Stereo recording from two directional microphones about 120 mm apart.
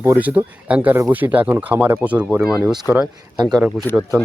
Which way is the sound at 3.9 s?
15° left (ahead or behind).